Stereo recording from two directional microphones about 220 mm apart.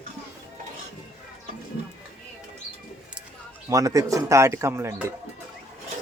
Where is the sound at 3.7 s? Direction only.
15° right (ahead or behind).